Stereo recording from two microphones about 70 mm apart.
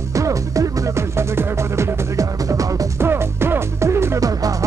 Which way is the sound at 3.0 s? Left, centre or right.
Right.